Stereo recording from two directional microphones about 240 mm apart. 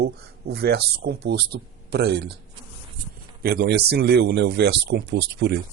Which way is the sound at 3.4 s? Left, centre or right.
Right.